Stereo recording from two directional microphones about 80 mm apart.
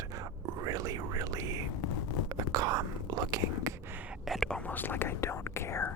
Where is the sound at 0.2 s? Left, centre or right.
Right.